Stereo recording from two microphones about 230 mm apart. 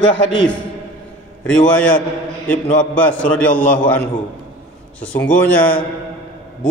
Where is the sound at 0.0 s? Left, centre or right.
Left.